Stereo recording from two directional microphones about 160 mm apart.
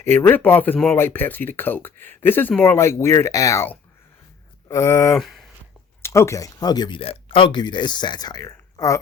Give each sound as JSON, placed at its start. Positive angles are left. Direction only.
{"t": 0.0, "sound": "speech", "side_deg": 15}
{"t": 5.1, "sound": "speech", "side_deg": 0}
{"t": 6.0, "sound": "speech", "side_deg": 15}